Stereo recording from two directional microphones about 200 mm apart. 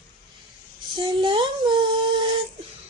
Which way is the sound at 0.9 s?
25° right (ahead or behind).